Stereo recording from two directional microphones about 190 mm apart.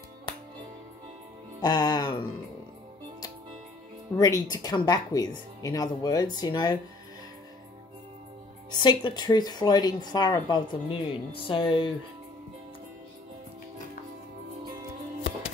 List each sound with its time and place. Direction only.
1.6 s music: 20° left (ahead or behind)
4.2 s speech: 20° left (ahead or behind)
8.7 s speech: 25° left (ahead or behind)